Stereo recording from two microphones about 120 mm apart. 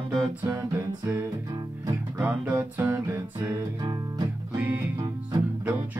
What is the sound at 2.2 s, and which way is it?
Music, 15° right (ahead or behind).